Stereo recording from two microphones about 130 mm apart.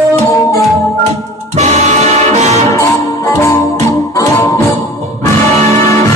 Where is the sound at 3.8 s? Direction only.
25° left (ahead or behind).